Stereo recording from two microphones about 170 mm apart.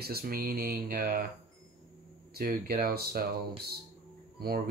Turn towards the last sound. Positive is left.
turn(degrees=-65)  # may be behind; listen again after turning